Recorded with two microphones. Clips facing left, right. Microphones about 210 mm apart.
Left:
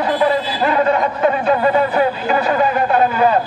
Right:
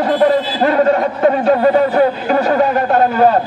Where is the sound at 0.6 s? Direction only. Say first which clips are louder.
Right 3 dB; 45° right (ahead or behind).